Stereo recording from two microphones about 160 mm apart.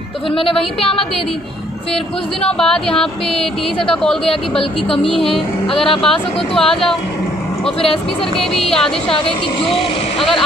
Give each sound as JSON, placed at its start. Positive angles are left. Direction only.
{"t": 0.3, "sound": "speech", "side_deg": 35}
{"t": 2.4, "sound": "speech", "side_deg": 5}
{"t": 4.3, "sound": "speech", "side_deg": 35}
{"t": 6.5, "sound": "speech", "side_deg": 5}
{"t": 8.4, "sound": "speech", "side_deg": 0}
{"t": 9.1, "sound": "speech", "side_deg": 35}
{"t": 10.1, "sound": "vehicle", "side_deg": 0}